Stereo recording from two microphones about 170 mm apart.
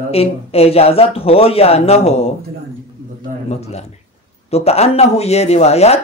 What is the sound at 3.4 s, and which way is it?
Speech, 40° left (ahead or behind).